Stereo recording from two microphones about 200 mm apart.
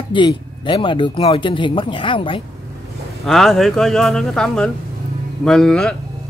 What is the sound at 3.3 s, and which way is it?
Speech, centre (ahead or behind).